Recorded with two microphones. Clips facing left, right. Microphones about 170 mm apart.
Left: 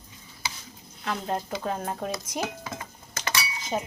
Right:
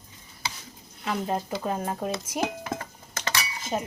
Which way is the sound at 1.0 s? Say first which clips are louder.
Right 2 dB; 5° right (ahead or behind).